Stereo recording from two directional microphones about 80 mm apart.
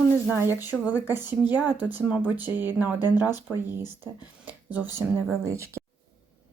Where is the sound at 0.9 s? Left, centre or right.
Right.